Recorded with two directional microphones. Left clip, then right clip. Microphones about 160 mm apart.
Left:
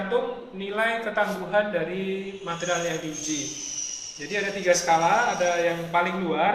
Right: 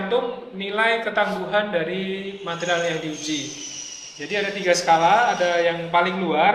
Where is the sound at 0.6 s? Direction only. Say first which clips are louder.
Right 5 dB; 20° right (ahead or behind).